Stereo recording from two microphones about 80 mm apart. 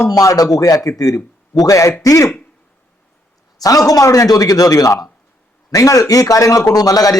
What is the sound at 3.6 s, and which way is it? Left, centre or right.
Speech, left.